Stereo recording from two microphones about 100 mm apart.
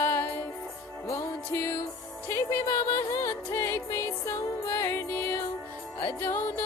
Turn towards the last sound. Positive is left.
turn(degrees=20)  # may be behind; listen again after turning